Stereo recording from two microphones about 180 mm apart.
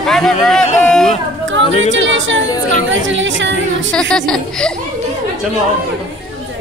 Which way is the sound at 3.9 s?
5° left (ahead or behind).